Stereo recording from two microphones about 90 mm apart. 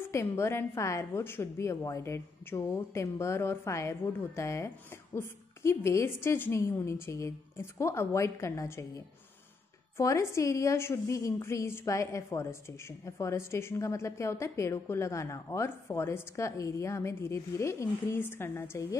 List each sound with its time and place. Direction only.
0.1 s a woman's voice: 30° left (ahead or behind)